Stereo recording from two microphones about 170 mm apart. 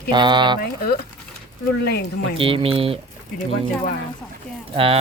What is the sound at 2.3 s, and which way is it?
Speech, 30° right (ahead or behind).